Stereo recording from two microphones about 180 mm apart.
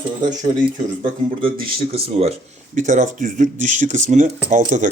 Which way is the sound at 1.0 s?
30° right (ahead or behind).